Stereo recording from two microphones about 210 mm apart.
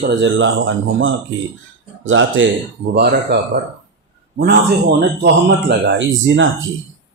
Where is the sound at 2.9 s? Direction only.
50° right (ahead or behind).